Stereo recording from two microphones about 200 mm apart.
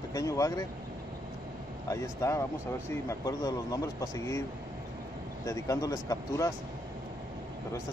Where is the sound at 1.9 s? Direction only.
15° left (ahead or behind).